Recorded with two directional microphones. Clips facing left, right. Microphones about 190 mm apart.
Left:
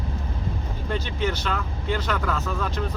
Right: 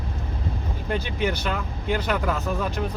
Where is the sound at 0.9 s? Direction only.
15° right (ahead or behind).